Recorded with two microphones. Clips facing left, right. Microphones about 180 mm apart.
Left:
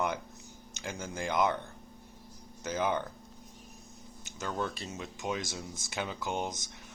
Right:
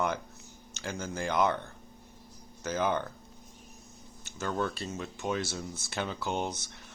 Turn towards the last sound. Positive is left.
turn(degrees=15)  # may be behind; listen again after turning